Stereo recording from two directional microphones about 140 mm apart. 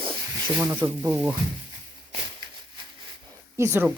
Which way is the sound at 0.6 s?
15° right (ahead or behind).